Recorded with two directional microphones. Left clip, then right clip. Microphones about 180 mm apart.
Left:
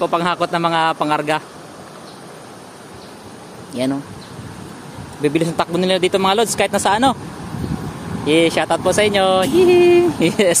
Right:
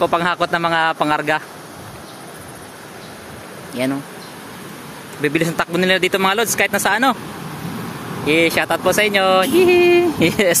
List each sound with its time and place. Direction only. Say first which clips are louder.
0.0 s speech: right 1 dB; centre (ahead or behind)
3.8 s speech: even; 20° left (ahead or behind)
5.2 s speech: left 1 dB; 10° left (ahead or behind)
8.3 s speech: left 1 dB; 15° left (ahead or behind)